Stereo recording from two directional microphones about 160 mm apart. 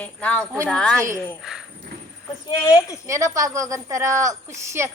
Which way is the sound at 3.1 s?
20° right (ahead or behind).